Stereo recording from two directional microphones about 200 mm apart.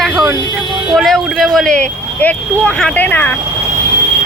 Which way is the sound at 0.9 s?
Centre (ahead or behind).